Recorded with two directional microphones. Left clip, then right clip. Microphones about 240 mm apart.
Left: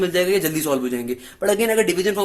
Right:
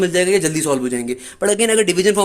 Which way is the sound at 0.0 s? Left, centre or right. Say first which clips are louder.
Right 3 dB; right.